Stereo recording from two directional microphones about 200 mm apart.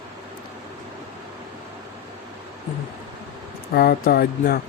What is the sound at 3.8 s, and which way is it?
Speech, 50° left (ahead or behind).